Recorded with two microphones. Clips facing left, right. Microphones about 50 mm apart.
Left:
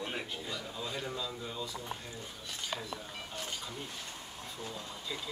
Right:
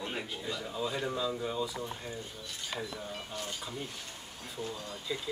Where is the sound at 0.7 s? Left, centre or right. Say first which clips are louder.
Right 7 dB; centre.